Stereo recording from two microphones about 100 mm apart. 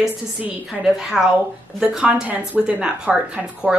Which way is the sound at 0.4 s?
10° right (ahead or behind).